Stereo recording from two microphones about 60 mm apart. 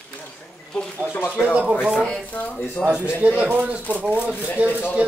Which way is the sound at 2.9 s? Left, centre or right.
Centre.